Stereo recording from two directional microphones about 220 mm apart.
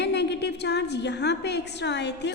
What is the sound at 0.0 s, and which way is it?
A woman's voice, 50° left (ahead or behind).